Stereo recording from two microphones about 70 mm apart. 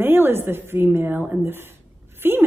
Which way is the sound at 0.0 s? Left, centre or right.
Right.